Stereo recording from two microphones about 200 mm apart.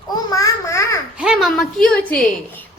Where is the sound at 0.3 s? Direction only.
15° left (ahead or behind).